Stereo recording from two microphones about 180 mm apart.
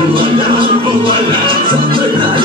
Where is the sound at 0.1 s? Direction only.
30° right (ahead or behind).